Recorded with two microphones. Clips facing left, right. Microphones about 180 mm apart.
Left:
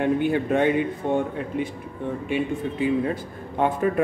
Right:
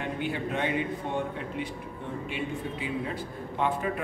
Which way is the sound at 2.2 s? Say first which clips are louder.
Left 9 dB; 50° left (ahead or behind).